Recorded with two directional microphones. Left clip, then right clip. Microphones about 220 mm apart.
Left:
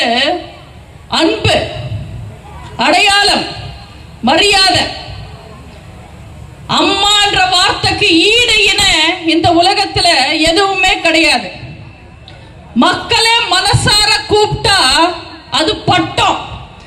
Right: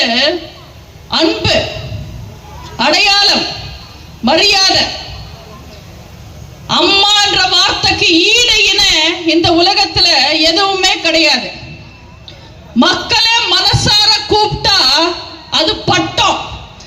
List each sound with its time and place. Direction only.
0.1 s a woman's voice: 20° left (ahead or behind)
2.7 s a man's voice: 20° left (ahead or behind)
6.7 s a sound: 20° left (ahead or behind)
12.8 s a man's voice: 20° left (ahead or behind)